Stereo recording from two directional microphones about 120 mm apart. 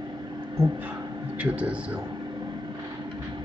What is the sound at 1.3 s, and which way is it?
Speech, 10° right (ahead or behind).